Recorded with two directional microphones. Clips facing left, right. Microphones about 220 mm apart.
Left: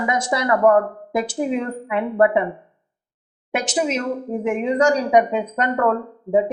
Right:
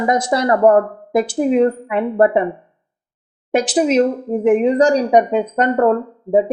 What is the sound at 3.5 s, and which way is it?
A woman's voice, 35° right (ahead or behind).